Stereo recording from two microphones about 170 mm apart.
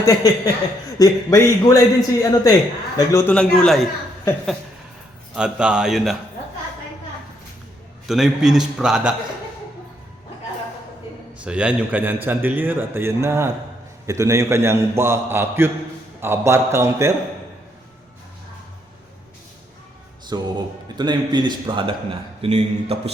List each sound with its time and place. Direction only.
0.0 s a man's voice: 20° left (ahead or behind)
3.3 s a man's voice: 5° left (ahead or behind)
5.3 s a man's voice: 5° right (ahead or behind)
8.0 s a man's voice: centre (ahead or behind)
11.4 s a man's voice: 5° right (ahead or behind)
20.3 s music: 20° right (ahead or behind)
21.0 s a man's voice: 25° right (ahead or behind)